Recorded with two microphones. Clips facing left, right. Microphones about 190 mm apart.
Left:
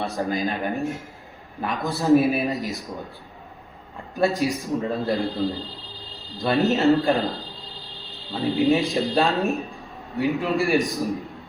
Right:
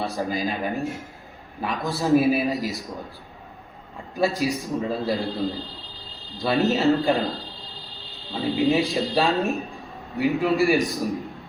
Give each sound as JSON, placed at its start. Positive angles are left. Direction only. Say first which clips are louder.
{"t": 0.0, "sound": "a man's voice", "louder": "left 1 dB", "side_deg": 0}
{"t": 4.1, "sound": "a man's voice", "louder": "left 1 dB", "side_deg": 0}